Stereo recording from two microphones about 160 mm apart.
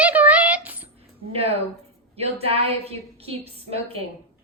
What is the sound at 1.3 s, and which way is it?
A woman's voice, 40° right (ahead or behind).